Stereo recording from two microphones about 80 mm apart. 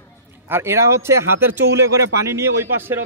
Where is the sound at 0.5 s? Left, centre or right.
Right.